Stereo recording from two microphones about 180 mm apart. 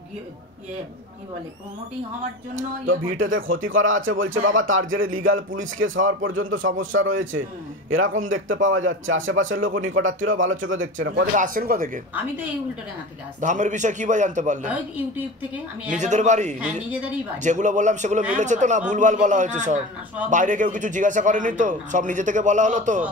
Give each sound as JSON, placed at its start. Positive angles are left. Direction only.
{"t": 2.5, "sound": "speech", "side_deg": -90}
{"t": 11.3, "sound": "speech", "side_deg": -50}
{"t": 13.4, "sound": "speech", "side_deg": -45}
{"t": 15.5, "sound": "a woman's voice", "side_deg": -10}
{"t": 16.0, "sound": "a man's voice", "side_deg": -40}